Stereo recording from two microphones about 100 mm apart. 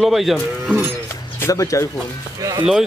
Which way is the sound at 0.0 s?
Centre (ahead or behind).